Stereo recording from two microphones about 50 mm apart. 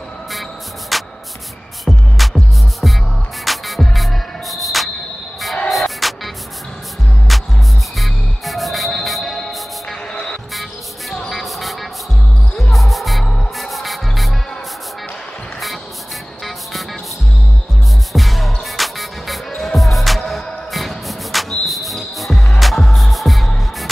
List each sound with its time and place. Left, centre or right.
0.3 s music: centre
10.1 s music: centre
10.5 s music: centre
11.2 s vehicle: centre
12.7 s music: centre
18.1 s music: centre